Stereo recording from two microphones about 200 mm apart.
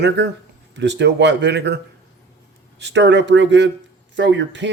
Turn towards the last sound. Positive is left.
turn(degrees=-65)  # may be behind; listen again after turning